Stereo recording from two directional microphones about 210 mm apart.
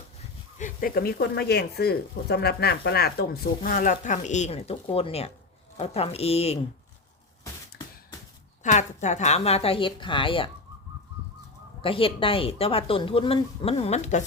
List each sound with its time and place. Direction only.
0.6 s speech: 45° left (ahead or behind)
8.6 s speech: 35° left (ahead or behind)
11.8 s speech: 25° left (ahead or behind)